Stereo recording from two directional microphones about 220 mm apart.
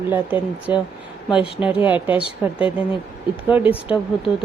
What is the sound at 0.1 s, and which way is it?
A woman's voice, 5° right (ahead or behind).